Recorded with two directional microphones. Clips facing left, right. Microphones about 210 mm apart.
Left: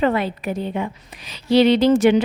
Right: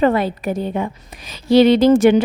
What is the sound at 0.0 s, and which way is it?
Speech, 45° right (ahead or behind).